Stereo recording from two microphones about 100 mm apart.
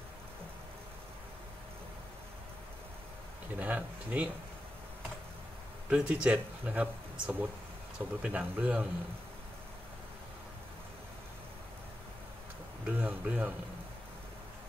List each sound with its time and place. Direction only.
3.5 s speech: 15° right (ahead or behind)
5.9 s speech: 10° right (ahead or behind)
12.8 s speech: 15° right (ahead or behind)